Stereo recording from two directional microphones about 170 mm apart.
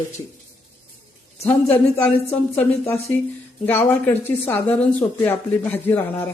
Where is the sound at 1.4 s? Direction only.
35° left (ahead or behind).